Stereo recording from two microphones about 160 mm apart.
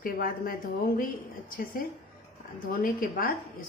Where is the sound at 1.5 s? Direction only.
60° left (ahead or behind).